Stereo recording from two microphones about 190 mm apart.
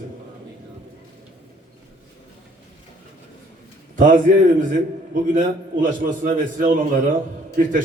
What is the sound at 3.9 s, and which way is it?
Speech, 45° right (ahead or behind).